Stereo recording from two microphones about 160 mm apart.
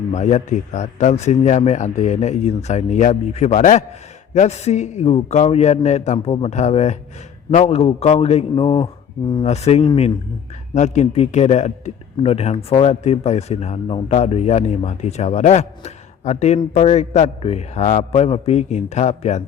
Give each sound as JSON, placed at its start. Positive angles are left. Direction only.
{"t": 0.1, "sound": "speech", "side_deg": 45}
{"t": 9.4, "sound": "speech", "side_deg": 40}